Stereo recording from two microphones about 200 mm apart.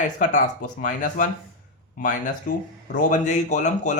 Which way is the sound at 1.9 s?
40° left (ahead or behind).